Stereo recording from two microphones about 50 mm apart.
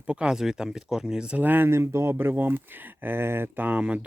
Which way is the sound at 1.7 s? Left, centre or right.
Right.